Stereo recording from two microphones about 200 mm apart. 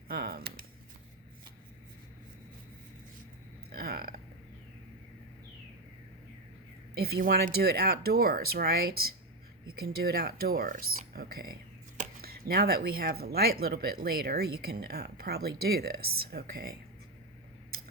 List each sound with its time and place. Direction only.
0.1 s a sound: 50° right (ahead or behind)
3.7 s burping: 50° right (ahead or behind)
7.3 s speech: 50° right (ahead or behind)